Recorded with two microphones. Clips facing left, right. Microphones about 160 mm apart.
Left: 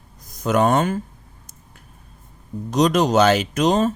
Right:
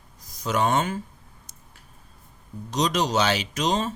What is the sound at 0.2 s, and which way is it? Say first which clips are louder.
Speech: left 6 dB; 55° left (ahead or behind).